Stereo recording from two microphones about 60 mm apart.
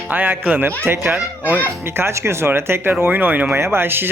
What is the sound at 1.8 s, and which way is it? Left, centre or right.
Speech, right.